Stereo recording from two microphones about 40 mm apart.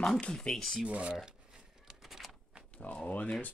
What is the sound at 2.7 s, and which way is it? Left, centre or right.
Speech, left.